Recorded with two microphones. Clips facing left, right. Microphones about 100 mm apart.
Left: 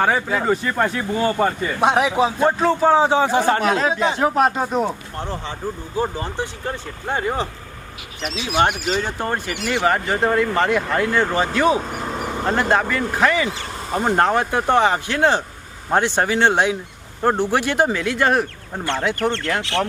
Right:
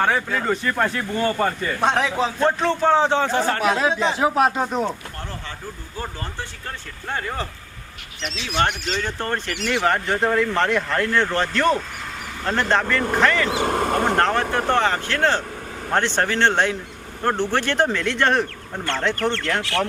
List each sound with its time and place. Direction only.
0.0 s speech: 5° left (ahead or behind)
3.6 s speech: centre (ahead or behind)
5.1 s speech: 20° left (ahead or behind)
8.2 s speech: 5° left (ahead or behind)
11.8 s vehicle: 45° left (ahead or behind)
12.5 s speech: 10° left (ahead or behind)
13.5 s speech: 60° right (ahead or behind)
14.2 s speech: 10° left (ahead or behind)